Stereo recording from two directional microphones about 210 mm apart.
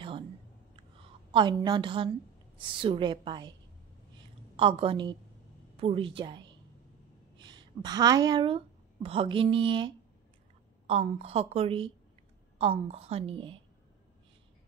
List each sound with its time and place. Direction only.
1.3 s a woman's voice: 20° right (ahead or behind)
4.6 s a woman's voice: 25° right (ahead or behind)